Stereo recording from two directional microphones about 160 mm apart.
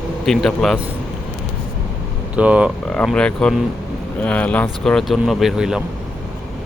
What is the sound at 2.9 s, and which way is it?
Speech, 5° left (ahead or behind).